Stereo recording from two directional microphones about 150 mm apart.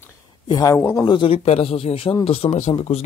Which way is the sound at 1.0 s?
35° left (ahead or behind).